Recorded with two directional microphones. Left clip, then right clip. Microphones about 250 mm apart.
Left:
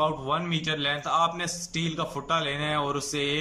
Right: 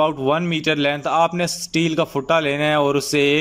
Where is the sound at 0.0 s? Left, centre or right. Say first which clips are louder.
Right 8 dB; right.